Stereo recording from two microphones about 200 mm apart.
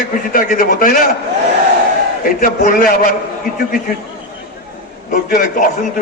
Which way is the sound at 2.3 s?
45° left (ahead or behind).